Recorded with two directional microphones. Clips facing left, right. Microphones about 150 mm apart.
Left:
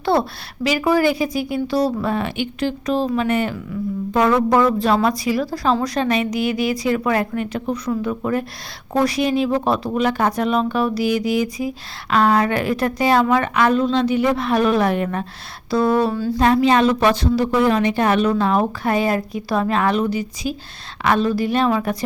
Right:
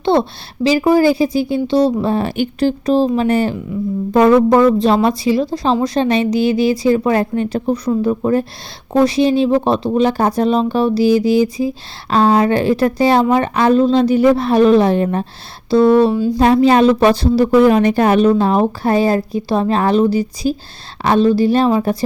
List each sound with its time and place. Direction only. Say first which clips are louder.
0.0 s a woman's voice: right 4 dB; 25° right (ahead or behind)
16.4 s a woman's voice: right 4 dB; 35° right (ahead or behind)